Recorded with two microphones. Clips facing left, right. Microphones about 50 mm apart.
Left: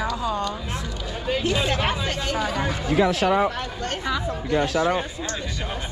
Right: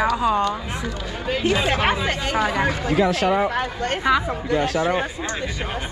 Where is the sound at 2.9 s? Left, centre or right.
Right.